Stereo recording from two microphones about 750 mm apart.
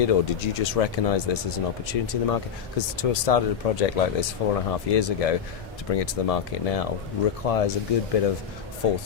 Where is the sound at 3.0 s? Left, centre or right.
Left.